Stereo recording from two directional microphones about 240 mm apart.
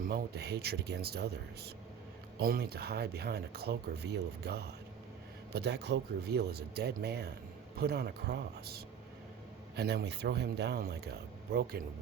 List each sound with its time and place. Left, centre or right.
0.0 s speech: right